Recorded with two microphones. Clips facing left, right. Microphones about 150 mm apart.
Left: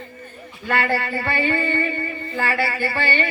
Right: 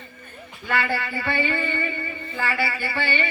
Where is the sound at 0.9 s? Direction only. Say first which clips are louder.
Left 3 dB; 45° left (ahead or behind).